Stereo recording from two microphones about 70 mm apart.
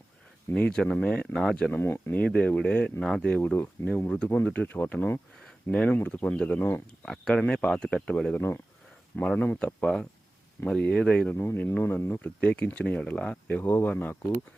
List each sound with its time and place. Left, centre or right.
0.5 s speech: centre
1.7 s speech: left
3.8 s speech: left; by 6.6 s centre
6.6 s speech: left
7.0 s speech: centre
11.3 s speech: left
12.2 s speech: centre
13.5 s speech: left